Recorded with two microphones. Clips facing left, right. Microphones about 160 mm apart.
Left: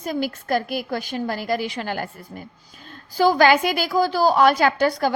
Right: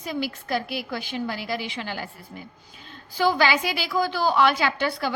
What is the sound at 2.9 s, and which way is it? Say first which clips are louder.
A woman's voice: left 4 dB; 40° left (ahead or behind).